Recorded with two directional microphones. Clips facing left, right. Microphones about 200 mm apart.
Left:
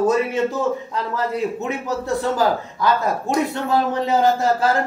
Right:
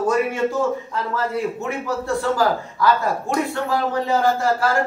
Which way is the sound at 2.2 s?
20° left (ahead or behind).